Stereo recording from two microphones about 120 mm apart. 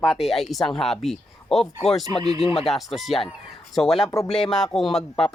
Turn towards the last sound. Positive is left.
turn(degrees=5)  # may be behind; listen again after turning